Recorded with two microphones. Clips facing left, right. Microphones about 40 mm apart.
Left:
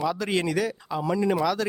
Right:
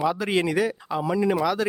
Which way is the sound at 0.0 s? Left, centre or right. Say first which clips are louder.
Right 2 dB; centre.